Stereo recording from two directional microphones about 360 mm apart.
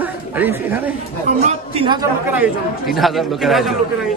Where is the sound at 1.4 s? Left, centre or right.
Centre.